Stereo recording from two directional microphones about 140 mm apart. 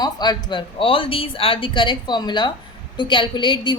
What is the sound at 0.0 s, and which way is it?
A woman's voice, 30° left (ahead or behind).